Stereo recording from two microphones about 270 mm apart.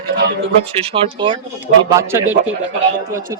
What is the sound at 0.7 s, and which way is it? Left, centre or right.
A man's voice, right.